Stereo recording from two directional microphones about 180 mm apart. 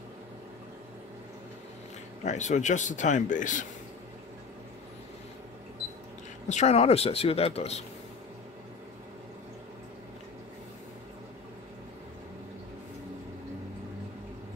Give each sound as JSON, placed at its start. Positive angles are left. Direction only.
{"t": 2.2, "sound": "speech", "side_deg": 40}
{"t": 6.5, "sound": "speech", "side_deg": 35}